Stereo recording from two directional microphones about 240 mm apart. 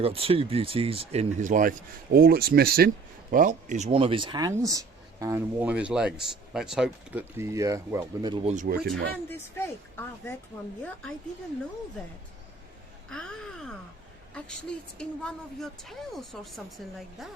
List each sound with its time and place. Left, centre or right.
0.0 s speech: right
13.1 s speech: centre
14.9 s speech: centre